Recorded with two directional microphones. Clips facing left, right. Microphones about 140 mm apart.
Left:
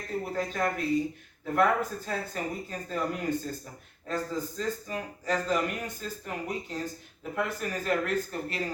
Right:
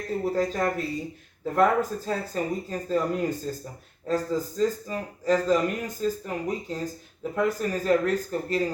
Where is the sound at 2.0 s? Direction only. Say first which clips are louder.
Right 5 dB; 35° right (ahead or behind).